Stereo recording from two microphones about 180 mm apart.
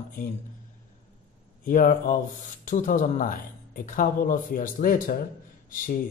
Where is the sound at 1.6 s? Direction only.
45° left (ahead or behind).